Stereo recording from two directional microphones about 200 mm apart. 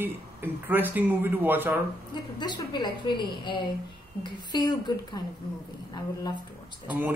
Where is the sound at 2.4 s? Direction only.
20° left (ahead or behind).